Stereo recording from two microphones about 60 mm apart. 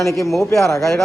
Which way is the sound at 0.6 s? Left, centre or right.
Left.